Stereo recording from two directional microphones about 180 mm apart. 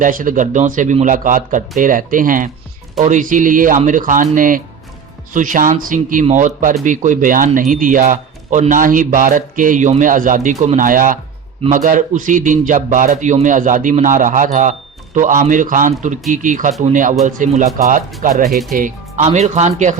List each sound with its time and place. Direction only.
0.0 s a man's voice: 45° right (ahead or behind)